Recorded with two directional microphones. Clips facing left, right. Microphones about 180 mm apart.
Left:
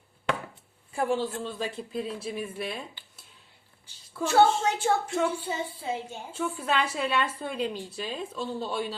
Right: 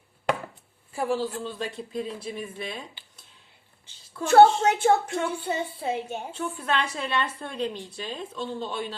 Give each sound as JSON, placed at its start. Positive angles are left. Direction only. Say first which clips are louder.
{"t": 0.9, "sound": "a man's voice", "louder": "even", "side_deg": 0}
{"t": 4.4, "sound": "a woman's voice", "louder": "right 5 dB", "side_deg": -65}
{"t": 6.3, "sound": "a woman's voice", "louder": "left 1 dB", "side_deg": 5}